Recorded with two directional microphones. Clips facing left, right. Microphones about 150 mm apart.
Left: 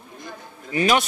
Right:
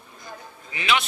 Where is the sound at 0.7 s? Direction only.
40° left (ahead or behind).